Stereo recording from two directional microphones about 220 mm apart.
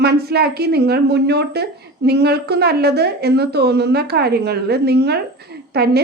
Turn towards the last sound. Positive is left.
turn(degrees=-45)  # may be behind; listen again after turning